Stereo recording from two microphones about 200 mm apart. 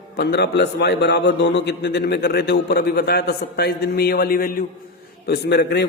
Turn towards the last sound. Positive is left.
turn(degrees=55)  # may be behind; listen again after turning